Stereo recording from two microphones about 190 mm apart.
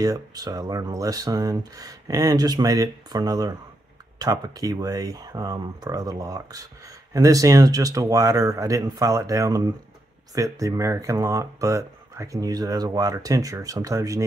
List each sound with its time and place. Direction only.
0.0 s speech: 20° right (ahead or behind)